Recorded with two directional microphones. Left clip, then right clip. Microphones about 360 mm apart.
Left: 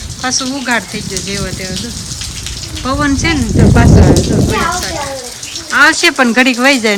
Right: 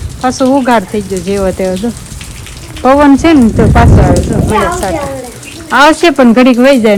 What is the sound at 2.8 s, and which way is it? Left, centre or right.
Speech, centre.